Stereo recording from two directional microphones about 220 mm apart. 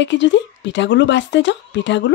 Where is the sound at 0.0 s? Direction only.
55° left (ahead or behind).